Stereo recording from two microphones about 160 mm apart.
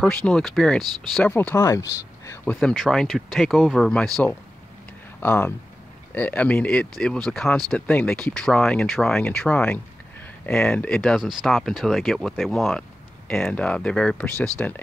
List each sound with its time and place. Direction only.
0.0 s speech: 5° left (ahead or behind)
1.3 s speech: 15° left (ahead or behind)
2.6 s speech: centre (ahead or behind)
5.2 s speech: 15° left (ahead or behind)